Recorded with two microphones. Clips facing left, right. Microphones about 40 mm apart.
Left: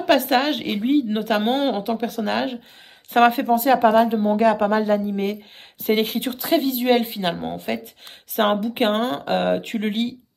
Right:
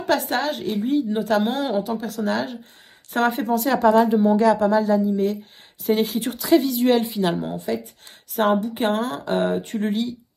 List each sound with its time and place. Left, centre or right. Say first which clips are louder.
0.0 s a woman's voice: left 4 dB; left
7.5 s a woman's voice: right 1 dB; left
8.8 s speech: left 5 dB; left